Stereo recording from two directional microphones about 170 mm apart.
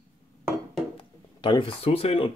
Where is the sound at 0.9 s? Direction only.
30° left (ahead or behind).